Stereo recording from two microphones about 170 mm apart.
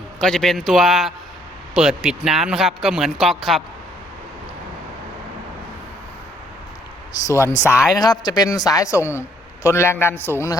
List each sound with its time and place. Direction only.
0.2 s speech: centre (ahead or behind)
7.1 s a man's voice: 15° left (ahead or behind)
7.7 s speech: 5° right (ahead or behind)
7.9 s a man's voice: 25° left (ahead or behind)